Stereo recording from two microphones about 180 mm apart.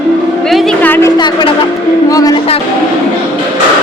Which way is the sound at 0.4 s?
Centre (ahead or behind).